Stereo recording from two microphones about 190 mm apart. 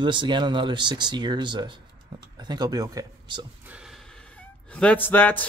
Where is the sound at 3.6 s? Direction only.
5° right (ahead or behind).